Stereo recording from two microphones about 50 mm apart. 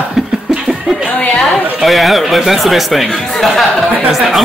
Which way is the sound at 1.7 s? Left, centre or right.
Centre.